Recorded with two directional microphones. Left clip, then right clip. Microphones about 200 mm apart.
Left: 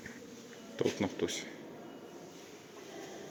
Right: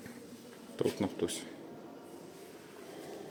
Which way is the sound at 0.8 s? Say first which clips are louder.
Even; 5° right (ahead or behind).